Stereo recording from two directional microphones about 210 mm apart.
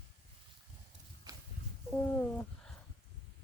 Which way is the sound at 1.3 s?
15° right (ahead or behind).